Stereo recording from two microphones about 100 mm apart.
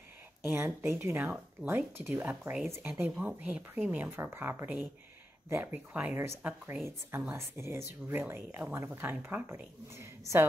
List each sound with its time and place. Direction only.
0.5 s speech: 25° right (ahead or behind)